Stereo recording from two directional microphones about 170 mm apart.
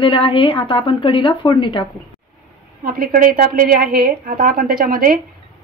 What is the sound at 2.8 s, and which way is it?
A woman's voice, 55° right (ahead or behind).